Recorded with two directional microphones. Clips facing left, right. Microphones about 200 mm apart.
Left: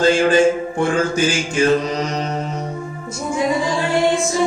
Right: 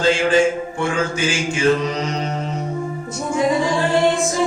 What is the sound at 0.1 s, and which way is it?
Mantra, 40° left (ahead or behind).